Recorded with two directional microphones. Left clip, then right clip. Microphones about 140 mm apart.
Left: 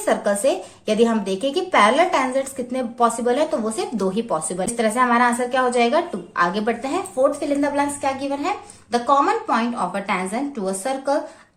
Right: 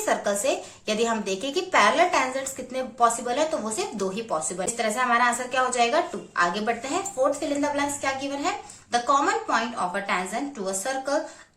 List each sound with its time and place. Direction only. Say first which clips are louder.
0.0 s a woman's voice: left 5 dB; 30° left (ahead or behind)